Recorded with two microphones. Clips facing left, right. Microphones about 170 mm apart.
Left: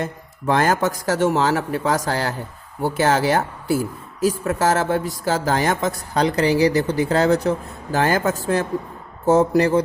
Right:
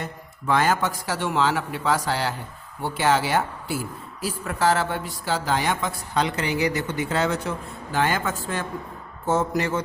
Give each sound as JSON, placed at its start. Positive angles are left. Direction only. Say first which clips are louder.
{"t": 0.0, "sound": "a woman's voice", "louder": "left 7 dB", "side_deg": 45}